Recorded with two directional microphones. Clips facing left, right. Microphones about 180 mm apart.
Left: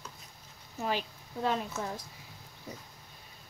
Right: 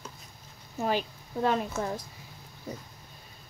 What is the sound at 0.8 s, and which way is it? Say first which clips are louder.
Speech: right 4 dB; 50° right (ahead or behind).